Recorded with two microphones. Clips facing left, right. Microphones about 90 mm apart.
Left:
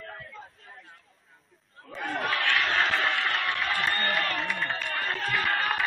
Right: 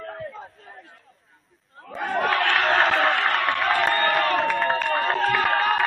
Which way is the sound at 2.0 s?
50° right (ahead or behind).